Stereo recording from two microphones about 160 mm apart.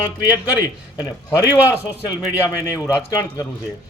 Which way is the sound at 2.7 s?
20° left (ahead or behind).